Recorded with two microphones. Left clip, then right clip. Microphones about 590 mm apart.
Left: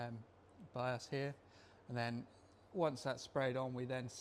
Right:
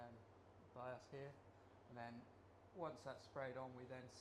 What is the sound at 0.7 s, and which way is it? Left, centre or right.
Speech, left.